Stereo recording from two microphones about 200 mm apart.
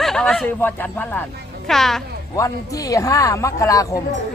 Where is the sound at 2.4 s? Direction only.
15° left (ahead or behind).